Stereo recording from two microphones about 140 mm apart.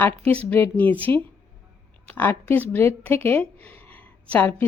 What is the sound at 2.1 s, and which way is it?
A woman's voice, 15° left (ahead or behind).